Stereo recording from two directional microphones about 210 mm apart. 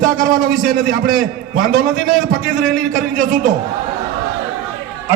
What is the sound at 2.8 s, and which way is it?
Speech, 40° right (ahead or behind).